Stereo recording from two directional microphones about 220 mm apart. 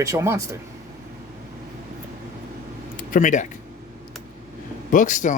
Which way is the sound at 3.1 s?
35° left (ahead or behind).